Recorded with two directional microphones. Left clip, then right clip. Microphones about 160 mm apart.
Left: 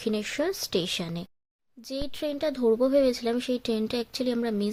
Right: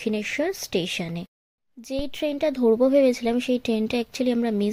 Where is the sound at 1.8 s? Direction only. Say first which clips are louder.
Right 5 dB; 15° right (ahead or behind).